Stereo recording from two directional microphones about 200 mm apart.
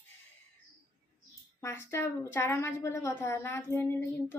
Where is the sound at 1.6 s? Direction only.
15° left (ahead or behind).